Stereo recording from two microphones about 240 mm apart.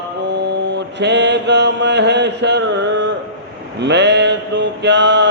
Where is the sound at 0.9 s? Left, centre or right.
Right.